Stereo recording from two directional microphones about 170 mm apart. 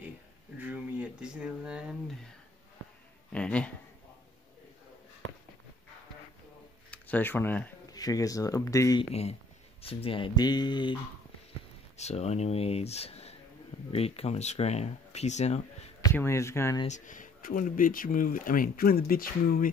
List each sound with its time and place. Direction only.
0.6 s speech: 10° right (ahead or behind)
3.3 s speech: 5° left (ahead or behind)
6.9 s speech: 10° left (ahead or behind)
7.9 s speech: 20° left (ahead or behind)
9.1 s speech: 40° left (ahead or behind)
12.0 s speech: 40° left (ahead or behind)
16.0 s speech: 15° left (ahead or behind)
16.8 s speech: 45° left (ahead or behind)